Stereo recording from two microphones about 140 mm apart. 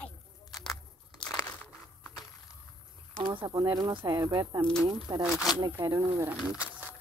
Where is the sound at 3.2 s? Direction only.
40° right (ahead or behind); by 4.7 s 20° right (ahead or behind).